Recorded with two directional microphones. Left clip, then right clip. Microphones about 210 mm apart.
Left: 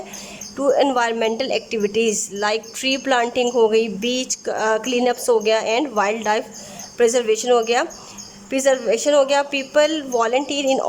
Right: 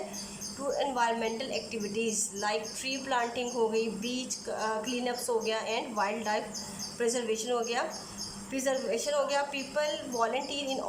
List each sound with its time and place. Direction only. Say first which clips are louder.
0.8 s a woman's voice: left 7 dB; 50° left (ahead or behind)